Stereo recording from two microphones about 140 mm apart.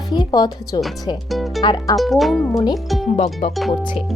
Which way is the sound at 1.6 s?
30° left (ahead or behind).